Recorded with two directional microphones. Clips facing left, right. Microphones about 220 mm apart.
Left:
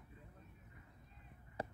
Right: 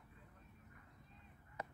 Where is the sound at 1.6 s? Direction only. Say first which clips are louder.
Left 5 dB; 30° left (ahead or behind).